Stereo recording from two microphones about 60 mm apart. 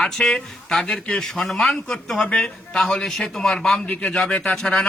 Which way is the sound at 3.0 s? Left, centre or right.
Centre.